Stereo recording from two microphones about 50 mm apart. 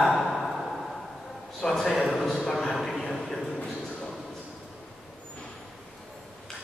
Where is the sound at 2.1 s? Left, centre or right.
Centre.